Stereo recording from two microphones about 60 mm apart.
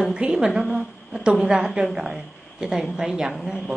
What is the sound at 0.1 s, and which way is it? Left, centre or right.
A woman's voice, centre.